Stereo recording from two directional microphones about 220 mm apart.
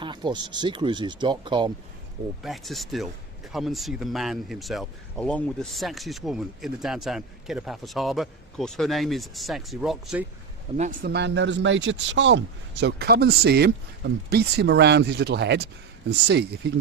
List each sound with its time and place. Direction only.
0.0 s speech: 20° right (ahead or behind)
2.4 s speech: centre (ahead or behind)
10.8 s speech: 35° right (ahead or behind)
11.1 s speech: 50° right (ahead or behind)